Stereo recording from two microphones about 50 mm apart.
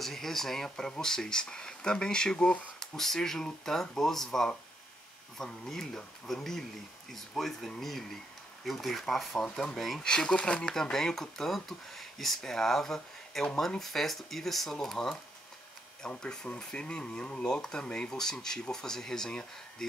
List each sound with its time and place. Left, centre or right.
0.0 s speech: centre
2.8 s speech: centre
16.1 s speech: left